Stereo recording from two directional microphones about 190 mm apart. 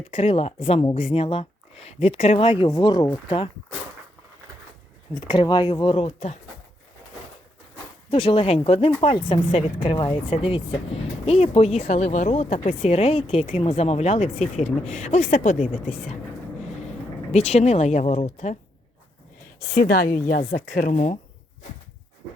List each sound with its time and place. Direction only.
0.1 s speech: 30° left (ahead or behind)
5.3 s speech: 25° left (ahead or behind)
8.1 s speech: 30° left (ahead or behind)
17.3 s speech: 35° left (ahead or behind)
19.5 s a woman's voice: 50° left (ahead or behind)